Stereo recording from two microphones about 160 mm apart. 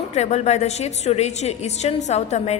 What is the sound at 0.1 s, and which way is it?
A woman's voice, 45° left (ahead or behind).